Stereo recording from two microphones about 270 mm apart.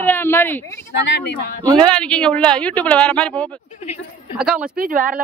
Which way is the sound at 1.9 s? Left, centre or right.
Centre.